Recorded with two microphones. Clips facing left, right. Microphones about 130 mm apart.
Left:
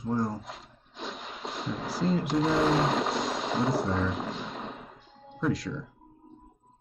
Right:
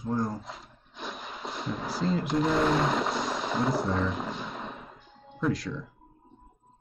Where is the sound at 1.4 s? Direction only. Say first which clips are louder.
Left 1 dB; 25° left (ahead or behind).